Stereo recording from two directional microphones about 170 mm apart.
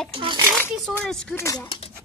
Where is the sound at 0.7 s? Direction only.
Centre (ahead or behind).